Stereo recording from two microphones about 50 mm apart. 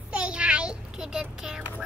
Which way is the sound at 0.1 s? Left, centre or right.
Right.